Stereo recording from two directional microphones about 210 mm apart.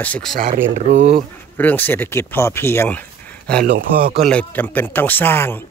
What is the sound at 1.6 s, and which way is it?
Speech, 10° left (ahead or behind).